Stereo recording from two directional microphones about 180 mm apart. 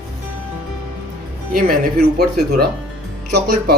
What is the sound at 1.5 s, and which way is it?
Speech, 60° right (ahead or behind).